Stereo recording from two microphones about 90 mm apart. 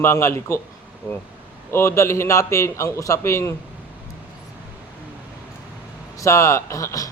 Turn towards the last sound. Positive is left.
turn(degrees=40)  # may be behind; listen again after turning